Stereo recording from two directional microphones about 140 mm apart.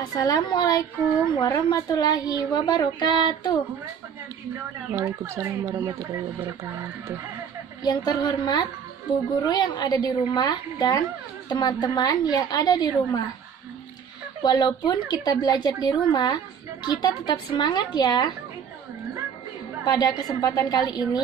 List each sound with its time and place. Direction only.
0.0 s a woman's voice: 25° left (ahead or behind)
4.9 s speech: 20° right (ahead or behind)
7.8 s a woman's voice: 30° left (ahead or behind)
14.4 s speech: 30° left (ahead or behind)
19.8 s a woman's voice: 30° left (ahead or behind)